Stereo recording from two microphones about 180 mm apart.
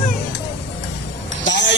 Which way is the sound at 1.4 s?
80° left.